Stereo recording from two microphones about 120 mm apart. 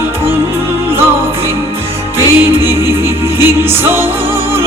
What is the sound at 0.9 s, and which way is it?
Music, 20° right (ahead or behind).